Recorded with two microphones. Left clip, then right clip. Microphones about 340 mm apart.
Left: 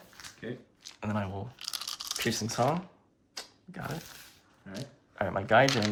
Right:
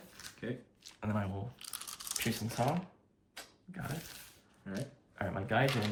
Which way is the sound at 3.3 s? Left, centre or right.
Centre.